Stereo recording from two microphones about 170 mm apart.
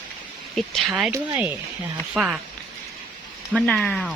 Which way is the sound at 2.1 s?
5° right (ahead or behind).